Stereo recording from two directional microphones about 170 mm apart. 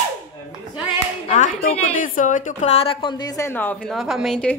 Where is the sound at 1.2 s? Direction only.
50° left (ahead or behind); by 3.9 s 10° left (ahead or behind).